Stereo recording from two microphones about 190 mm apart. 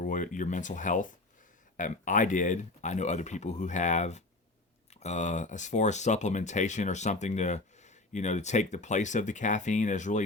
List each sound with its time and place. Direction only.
0.0 s speech: 45° left (ahead or behind)